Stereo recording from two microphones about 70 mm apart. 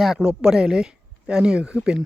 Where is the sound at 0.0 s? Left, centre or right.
Centre.